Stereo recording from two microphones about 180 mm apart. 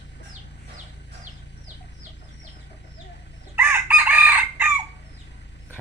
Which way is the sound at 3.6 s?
10° right (ahead or behind).